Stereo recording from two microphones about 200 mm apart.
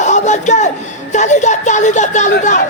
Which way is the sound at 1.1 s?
35° left (ahead or behind).